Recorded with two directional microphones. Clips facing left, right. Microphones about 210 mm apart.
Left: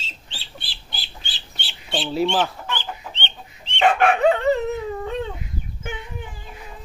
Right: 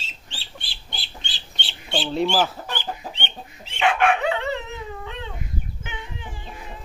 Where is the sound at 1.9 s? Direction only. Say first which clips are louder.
Left 1 dB; centre (ahead or behind).